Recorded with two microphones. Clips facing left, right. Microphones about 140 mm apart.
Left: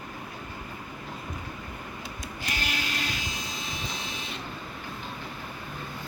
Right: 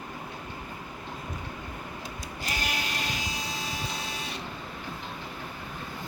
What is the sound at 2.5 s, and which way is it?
Vehicle, 40° right (ahead or behind).